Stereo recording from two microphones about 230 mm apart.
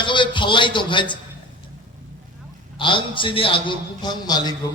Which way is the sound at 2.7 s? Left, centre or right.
Left.